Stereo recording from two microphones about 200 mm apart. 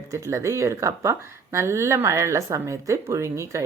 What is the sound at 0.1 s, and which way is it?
Speech, 15° right (ahead or behind).